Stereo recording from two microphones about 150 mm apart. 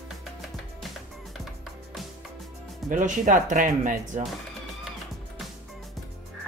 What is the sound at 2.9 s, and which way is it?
Speech, 60° right (ahead or behind).